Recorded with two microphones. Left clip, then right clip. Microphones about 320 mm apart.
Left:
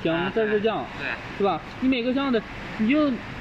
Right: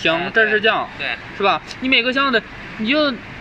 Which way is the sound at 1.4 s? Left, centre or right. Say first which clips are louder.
Right 6 dB; right.